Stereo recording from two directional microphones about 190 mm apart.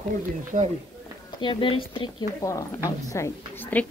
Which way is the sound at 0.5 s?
45° right (ahead or behind).